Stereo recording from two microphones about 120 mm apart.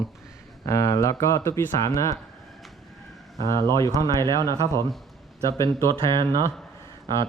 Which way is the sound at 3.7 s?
25° left (ahead or behind).